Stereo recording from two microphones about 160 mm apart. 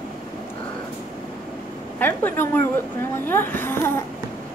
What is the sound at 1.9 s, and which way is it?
A woman's voice, 15° left (ahead or behind).